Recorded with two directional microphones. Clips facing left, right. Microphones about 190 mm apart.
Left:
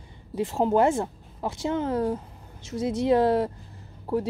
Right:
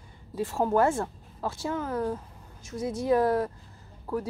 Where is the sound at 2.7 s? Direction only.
80° left.